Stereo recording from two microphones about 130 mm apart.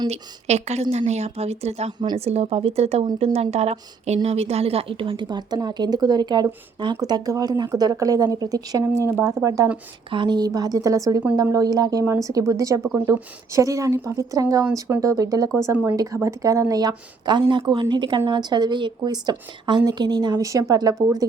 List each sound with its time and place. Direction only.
0.1 s a woman's voice: 55° right (ahead or behind); by 9.6 s 25° right (ahead or behind)
10.1 s a woman's voice: 35° right (ahead or behind)